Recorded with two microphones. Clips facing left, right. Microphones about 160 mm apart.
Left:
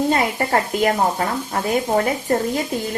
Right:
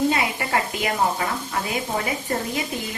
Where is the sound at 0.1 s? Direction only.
45° left (ahead or behind).